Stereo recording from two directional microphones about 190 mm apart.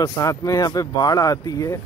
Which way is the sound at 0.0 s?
20° left (ahead or behind).